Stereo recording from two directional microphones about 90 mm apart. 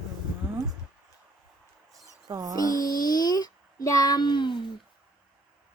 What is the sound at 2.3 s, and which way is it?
Music, 40° right (ahead or behind).